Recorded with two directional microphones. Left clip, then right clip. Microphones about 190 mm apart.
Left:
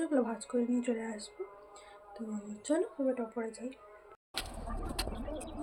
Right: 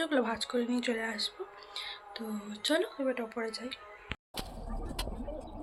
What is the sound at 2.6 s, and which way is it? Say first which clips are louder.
Speech: right 2 dB; 10° left (ahead or behind).